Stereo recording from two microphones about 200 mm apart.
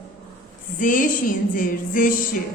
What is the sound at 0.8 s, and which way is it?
Speech, 40° left (ahead or behind).